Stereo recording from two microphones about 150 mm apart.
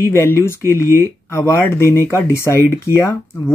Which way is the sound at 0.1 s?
15° left (ahead or behind).